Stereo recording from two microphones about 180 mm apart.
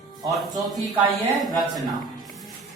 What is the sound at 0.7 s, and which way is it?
Speech, centre (ahead or behind).